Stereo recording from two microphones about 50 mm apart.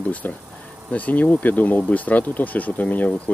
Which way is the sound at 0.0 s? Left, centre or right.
Left.